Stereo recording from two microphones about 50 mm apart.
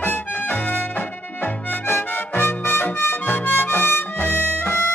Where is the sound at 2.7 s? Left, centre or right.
Left.